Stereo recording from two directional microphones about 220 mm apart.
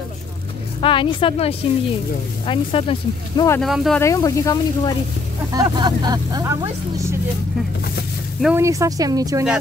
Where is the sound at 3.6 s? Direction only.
Centre (ahead or behind).